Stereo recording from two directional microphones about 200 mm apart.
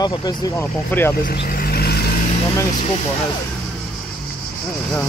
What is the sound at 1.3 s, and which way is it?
Vehicle, 45° left (ahead or behind).